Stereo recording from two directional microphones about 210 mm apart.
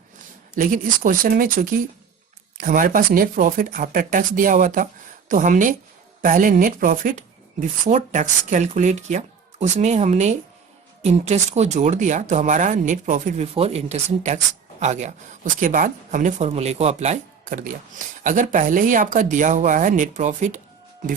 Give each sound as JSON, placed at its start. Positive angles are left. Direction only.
{"t": 0.5, "sound": "speech", "side_deg": -40}